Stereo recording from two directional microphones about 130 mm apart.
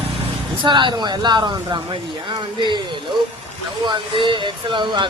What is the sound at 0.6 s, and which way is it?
Speech, 35° right (ahead or behind).